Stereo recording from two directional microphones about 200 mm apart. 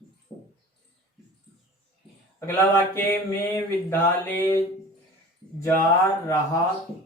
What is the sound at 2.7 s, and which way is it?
Mantra, 10° left (ahead or behind).